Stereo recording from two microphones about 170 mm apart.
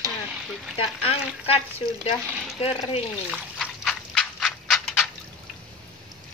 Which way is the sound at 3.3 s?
Centre (ahead or behind).